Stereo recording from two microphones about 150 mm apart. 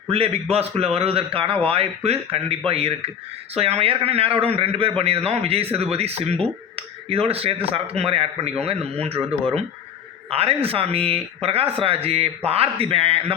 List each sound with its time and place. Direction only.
0.1 s a man's voice: 40° right (ahead or behind)